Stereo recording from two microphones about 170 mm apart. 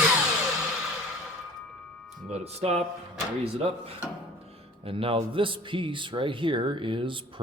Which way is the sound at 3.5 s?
35° right (ahead or behind).